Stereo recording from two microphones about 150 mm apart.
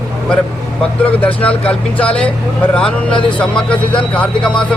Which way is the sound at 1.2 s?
10° left (ahead or behind).